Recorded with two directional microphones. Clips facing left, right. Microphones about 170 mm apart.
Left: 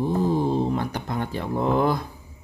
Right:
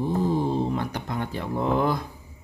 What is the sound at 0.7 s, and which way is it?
Speech, 40° left (ahead or behind).